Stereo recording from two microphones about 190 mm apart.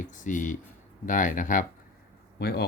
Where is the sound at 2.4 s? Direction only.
55° left (ahead or behind).